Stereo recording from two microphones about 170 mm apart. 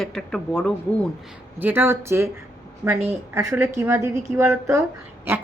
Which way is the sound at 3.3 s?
15° right (ahead or behind).